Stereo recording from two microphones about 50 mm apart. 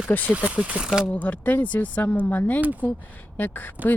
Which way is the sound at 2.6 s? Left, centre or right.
Right.